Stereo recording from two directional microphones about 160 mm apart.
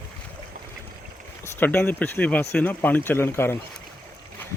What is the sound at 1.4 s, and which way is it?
Speech, 15° left (ahead or behind).